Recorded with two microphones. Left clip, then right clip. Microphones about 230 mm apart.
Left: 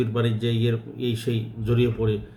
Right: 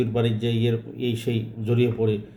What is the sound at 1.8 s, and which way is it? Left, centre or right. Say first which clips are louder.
Speech: right 1 dB; centre.